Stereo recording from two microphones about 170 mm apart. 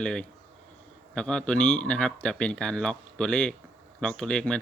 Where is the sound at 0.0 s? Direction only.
5° left (ahead or behind).